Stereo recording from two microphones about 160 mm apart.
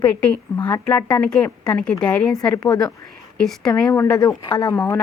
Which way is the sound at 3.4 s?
5° left (ahead or behind).